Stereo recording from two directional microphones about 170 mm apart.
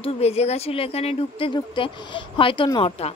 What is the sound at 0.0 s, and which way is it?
Speech, 35° left (ahead or behind).